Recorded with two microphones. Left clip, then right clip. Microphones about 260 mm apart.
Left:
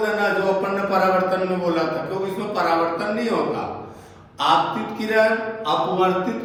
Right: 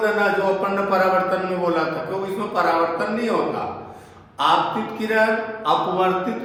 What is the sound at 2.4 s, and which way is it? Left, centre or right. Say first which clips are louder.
Speech: right 1 dB; centre.